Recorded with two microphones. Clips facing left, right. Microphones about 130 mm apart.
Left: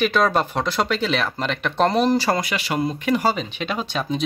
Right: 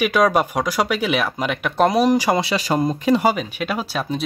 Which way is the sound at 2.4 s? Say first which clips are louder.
Right 4 dB; 35° right (ahead or behind).